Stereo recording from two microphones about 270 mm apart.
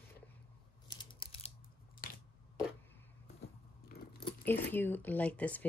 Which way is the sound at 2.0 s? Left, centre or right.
Left.